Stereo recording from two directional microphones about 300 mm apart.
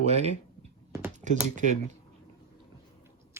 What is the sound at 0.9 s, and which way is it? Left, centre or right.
Typing, centre.